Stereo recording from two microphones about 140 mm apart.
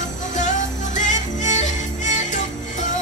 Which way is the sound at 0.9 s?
60° left (ahead or behind).